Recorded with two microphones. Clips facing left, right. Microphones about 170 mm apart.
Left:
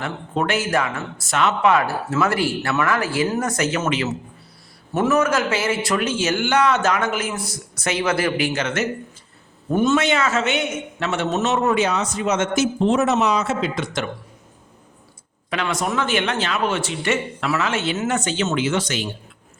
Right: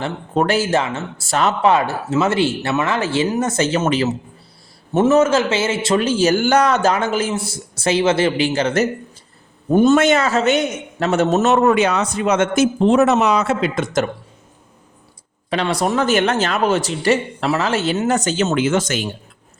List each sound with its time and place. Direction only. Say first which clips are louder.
0.0 s a man's voice: right 5 dB; 35° right (ahead or behind)
11.5 s speech: right 5 dB; 60° right (ahead or behind)
15.4 s a man's voice: right 5 dB; 35° right (ahead or behind)